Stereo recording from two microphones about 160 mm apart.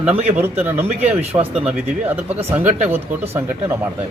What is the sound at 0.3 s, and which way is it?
Speech, 10° right (ahead or behind).